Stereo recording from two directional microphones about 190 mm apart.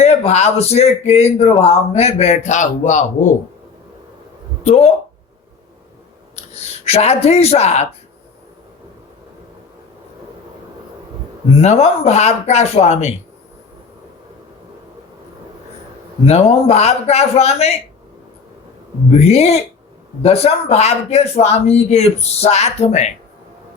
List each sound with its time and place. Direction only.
0.0 s speech: 35° left (ahead or behind)
4.6 s speech: 35° left (ahead or behind)
6.3 s speech: 35° left (ahead or behind)
11.6 s speech: 35° left (ahead or behind)
16.2 s speech: 35° left (ahead or behind)
19.1 s speech: 35° left (ahead or behind)